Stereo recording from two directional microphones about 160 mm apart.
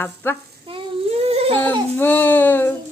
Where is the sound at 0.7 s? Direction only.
35° right (ahead or behind).